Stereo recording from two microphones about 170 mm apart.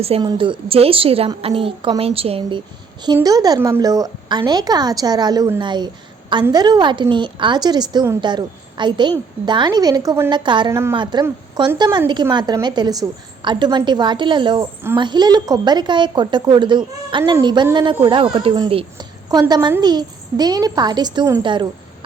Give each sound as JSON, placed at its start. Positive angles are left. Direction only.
{"t": 0.0, "sound": "a woman's voice", "side_deg": -30}
{"t": 10.7, "sound": "a woman's voice", "side_deg": -15}
{"t": 10.9, "sound": "a woman's voice", "side_deg": -25}